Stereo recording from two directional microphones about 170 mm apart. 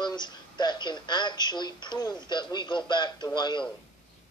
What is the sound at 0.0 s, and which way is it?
Speech, 25° left (ahead or behind).